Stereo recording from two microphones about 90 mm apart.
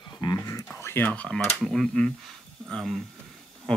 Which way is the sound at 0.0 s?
50° left (ahead or behind).